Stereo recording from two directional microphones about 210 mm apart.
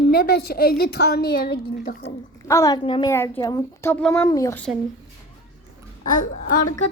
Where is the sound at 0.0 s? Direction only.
45° left (ahead or behind).